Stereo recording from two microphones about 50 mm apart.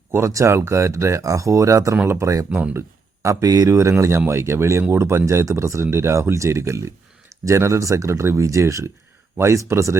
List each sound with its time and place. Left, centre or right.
0.1 s speech: right
4.3 s speech: right
9.4 s speech: right